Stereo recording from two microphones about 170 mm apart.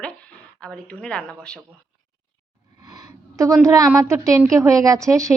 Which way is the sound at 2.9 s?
20° right (ahead or behind).